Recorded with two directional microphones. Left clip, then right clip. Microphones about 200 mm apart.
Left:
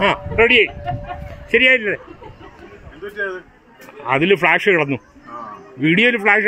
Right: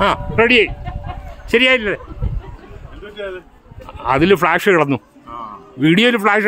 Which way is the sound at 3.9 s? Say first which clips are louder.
Right 2 dB; 30° right (ahead or behind).